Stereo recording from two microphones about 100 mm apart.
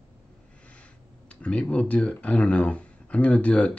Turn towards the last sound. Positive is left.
turn(degrees=10)  # may be behind; listen again after turning